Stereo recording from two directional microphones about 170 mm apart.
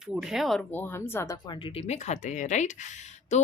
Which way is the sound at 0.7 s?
10° left (ahead or behind).